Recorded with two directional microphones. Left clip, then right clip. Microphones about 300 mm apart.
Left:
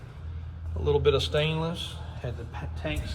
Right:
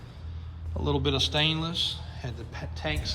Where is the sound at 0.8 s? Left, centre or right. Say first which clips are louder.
Left 3 dB; centre.